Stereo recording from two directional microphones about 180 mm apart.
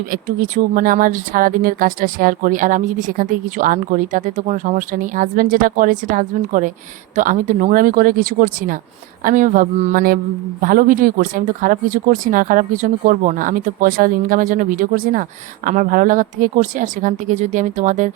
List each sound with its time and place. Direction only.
0.1 s speech: 50° right (ahead or behind)